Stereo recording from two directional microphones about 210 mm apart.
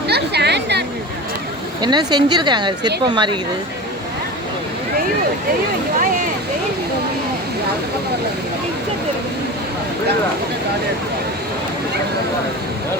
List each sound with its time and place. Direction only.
0.1 s chatter: 50° right (ahead or behind)
1.8 s speech: 20° right (ahead or behind)